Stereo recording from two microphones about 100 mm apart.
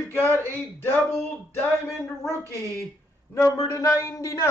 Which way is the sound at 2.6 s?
30° left (ahead or behind).